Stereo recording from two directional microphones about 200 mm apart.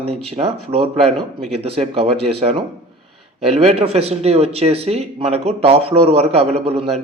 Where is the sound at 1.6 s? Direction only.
30° right (ahead or behind).